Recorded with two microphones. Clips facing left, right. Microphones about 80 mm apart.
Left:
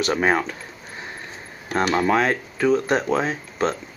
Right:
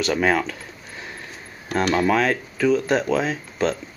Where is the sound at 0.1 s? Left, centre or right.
Left.